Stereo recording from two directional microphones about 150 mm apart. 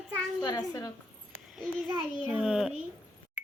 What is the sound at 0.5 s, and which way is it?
Speech, 20° left (ahead or behind).